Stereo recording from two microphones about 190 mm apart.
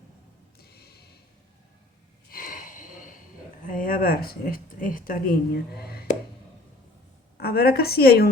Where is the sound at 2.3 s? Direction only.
45° left (ahead or behind).